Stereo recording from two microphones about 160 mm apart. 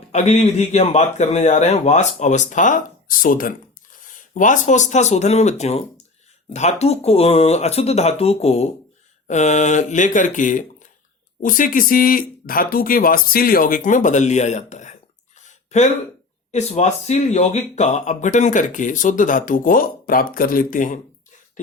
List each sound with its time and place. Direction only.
0.1 s speech: 45° left (ahead or behind)
15.4 s a sound: 50° left (ahead or behind)
16.5 s speech: 45° left (ahead or behind)